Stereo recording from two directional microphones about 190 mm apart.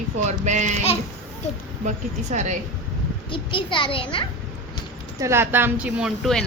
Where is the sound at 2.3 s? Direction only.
40° right (ahead or behind).